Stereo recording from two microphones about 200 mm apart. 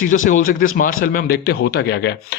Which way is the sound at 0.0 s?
40° left (ahead or behind).